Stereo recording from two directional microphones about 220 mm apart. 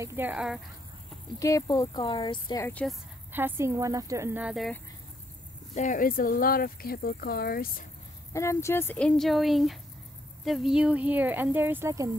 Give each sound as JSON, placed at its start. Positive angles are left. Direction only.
{"t": 0.0, "sound": "speech", "side_deg": -10}
{"t": 1.4, "sound": "speech", "side_deg": 15}
{"t": 3.3, "sound": "speech", "side_deg": -10}
{"t": 5.8, "sound": "speech", "side_deg": 35}
{"t": 8.3, "sound": "speech", "side_deg": 10}